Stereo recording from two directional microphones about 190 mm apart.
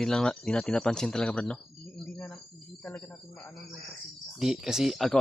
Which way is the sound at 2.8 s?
5° left (ahead or behind).